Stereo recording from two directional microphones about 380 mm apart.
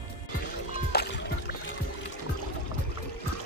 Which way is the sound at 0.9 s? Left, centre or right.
Left.